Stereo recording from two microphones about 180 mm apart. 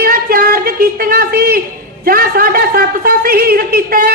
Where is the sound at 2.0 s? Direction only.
55° right (ahead or behind).